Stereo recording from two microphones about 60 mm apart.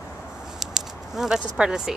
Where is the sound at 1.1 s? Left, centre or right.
Centre.